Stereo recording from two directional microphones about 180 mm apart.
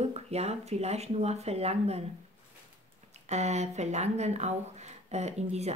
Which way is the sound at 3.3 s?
40° right (ahead or behind).